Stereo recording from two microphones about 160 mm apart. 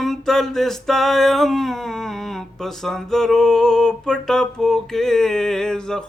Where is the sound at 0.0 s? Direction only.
Centre (ahead or behind).